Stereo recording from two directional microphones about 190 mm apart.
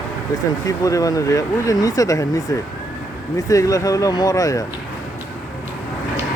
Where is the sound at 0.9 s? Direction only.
20° left (ahead or behind).